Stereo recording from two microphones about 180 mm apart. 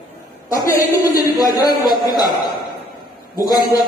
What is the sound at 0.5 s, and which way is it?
A man's voice, 15° left (ahead or behind).